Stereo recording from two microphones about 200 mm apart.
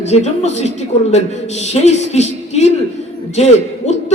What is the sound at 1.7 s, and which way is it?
A man's voice, 35° left (ahead or behind).